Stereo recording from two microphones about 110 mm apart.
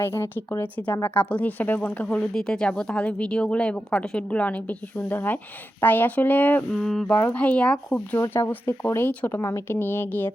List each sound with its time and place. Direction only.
0.0 s speech: 20° left (ahead or behind)
2.0 s speech: 5° left (ahead or behind)
6.7 s a sound: 5° left (ahead or behind)
7.2 s speech: 15° left (ahead or behind)
8.2 s speech: 20° left (ahead or behind)